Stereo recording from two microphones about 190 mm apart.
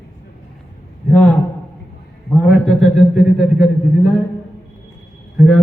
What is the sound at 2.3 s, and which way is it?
A man's voice, centre (ahead or behind).